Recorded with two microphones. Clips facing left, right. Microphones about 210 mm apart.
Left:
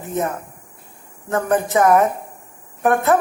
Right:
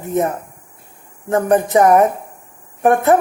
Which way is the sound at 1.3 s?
15° right (ahead or behind).